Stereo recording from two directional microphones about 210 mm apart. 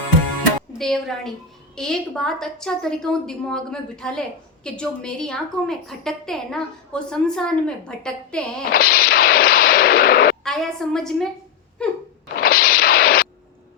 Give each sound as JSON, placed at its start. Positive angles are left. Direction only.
{"t": 0.7, "sound": "a woman's voice", "side_deg": 0}
{"t": 8.7, "sound": "artillery fire", "side_deg": 45}
{"t": 10.4, "sound": "a woman's voice", "side_deg": 0}
{"t": 12.4, "sound": "a sound", "side_deg": 45}